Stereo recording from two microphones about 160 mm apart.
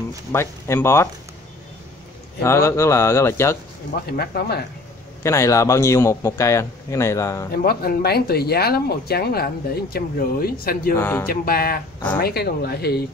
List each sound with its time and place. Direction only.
0.3 s speech: 15° left (ahead or behind)
2.4 s speech: 15° left (ahead or behind)
4.0 s speech: 80° left
5.2 s a man's voice: 20° left (ahead or behind)
7.5 s speech: 70° left (ahead or behind)
11.0 s speech: 15° left (ahead or behind)
11.2 s speech: 70° left (ahead or behind)